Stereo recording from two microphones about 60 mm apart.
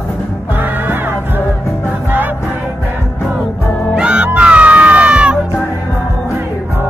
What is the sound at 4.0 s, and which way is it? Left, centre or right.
Music, right.